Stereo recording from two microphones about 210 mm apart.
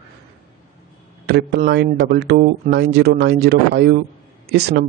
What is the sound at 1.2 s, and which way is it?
Speech, 50° right (ahead or behind).